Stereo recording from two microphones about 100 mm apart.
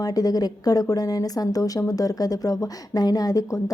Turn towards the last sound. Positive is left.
turn(degrees=35)  # may be behind; listen again after turning